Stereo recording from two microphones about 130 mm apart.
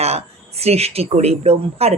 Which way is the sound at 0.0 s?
55° right (ahead or behind).